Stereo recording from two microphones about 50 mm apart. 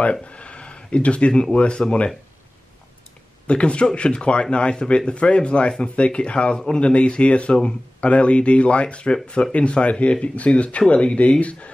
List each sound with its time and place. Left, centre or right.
0.0 s speech: left
3.4 s speech: left